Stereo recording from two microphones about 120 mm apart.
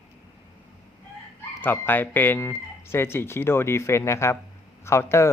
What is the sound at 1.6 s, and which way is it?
Speech, 15° left (ahead or behind).